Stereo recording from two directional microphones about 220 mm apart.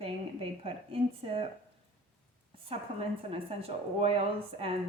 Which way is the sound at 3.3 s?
25° right (ahead or behind).